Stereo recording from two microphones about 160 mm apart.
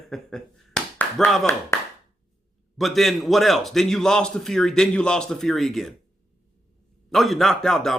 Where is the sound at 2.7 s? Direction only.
Centre (ahead or behind).